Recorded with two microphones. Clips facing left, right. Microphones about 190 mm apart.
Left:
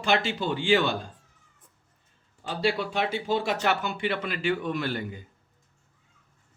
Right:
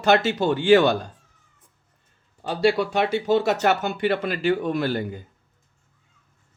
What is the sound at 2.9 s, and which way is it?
Speech, 70° right (ahead or behind).